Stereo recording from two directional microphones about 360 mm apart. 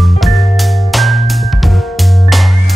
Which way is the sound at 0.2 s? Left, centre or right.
Centre.